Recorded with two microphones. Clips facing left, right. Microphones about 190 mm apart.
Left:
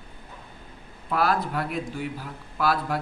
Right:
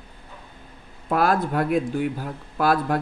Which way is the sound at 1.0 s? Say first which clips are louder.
Right 4 dB; 50° right (ahead or behind).